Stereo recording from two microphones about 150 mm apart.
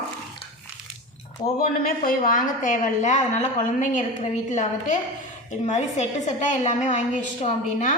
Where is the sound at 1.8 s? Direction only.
70° left (ahead or behind).